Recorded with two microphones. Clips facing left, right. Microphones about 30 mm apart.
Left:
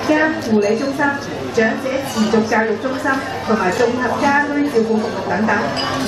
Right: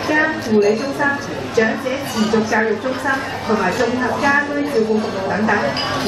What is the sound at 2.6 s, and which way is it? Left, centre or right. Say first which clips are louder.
A woman's voice: even; centre.